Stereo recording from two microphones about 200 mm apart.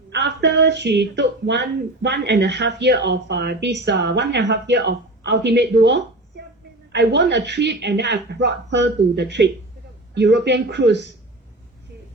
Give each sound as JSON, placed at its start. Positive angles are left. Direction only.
{"t": 0.1, "sound": "speech", "side_deg": -60}